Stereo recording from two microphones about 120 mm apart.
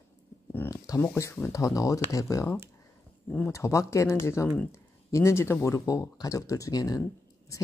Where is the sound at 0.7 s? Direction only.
25° left (ahead or behind).